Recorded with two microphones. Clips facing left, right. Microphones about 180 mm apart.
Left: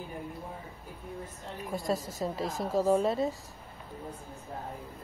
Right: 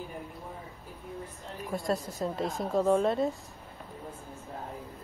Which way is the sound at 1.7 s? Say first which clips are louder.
Right 1 dB; centre (ahead or behind).